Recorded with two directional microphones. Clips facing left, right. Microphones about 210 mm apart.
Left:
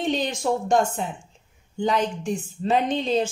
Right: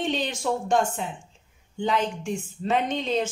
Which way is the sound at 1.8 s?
40° left (ahead or behind).